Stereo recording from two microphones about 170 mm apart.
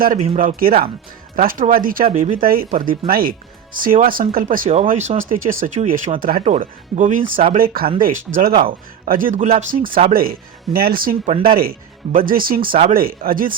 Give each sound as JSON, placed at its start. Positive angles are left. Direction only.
{"t": 0.3, "sound": "a man's voice", "side_deg": -55}
{"t": 2.0, "sound": "speech", "side_deg": -40}
{"t": 2.3, "sound": "a man's voice", "side_deg": -55}
{"t": 4.7, "sound": "speech", "side_deg": -40}
{"t": 5.3, "sound": "speech", "side_deg": -55}
{"t": 6.1, "sound": "a man's voice", "side_deg": -55}
{"t": 6.4, "sound": "a man's voice", "side_deg": -45}